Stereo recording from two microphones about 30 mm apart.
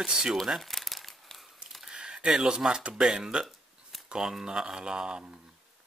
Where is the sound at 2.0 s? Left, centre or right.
Right.